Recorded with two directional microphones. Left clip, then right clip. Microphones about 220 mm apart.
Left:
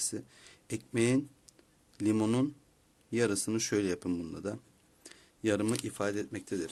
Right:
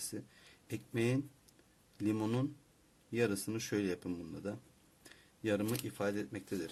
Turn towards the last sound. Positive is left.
turn(degrees=35)  # may be behind; listen again after turning